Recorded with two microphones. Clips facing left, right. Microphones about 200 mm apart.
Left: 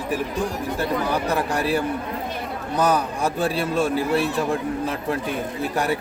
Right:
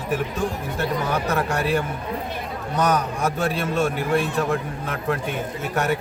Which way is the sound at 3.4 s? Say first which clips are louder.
Left 1 dB; 35° left (ahead or behind).